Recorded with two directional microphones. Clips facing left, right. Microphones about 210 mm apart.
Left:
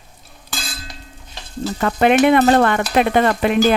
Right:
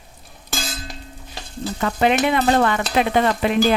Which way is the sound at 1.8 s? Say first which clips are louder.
Left 5 dB; 55° left (ahead or behind).